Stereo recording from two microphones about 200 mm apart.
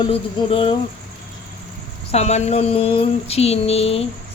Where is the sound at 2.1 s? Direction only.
35° left (ahead or behind).